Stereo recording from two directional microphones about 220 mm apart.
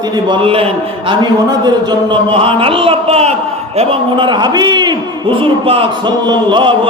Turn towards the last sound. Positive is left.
turn(degrees=-20)  # may be behind; listen again after turning